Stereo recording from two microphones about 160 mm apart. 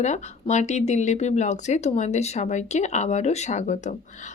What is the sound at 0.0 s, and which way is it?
Speech, 45° left (ahead or behind).